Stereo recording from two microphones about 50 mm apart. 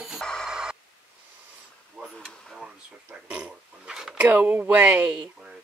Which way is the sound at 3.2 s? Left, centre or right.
Centre.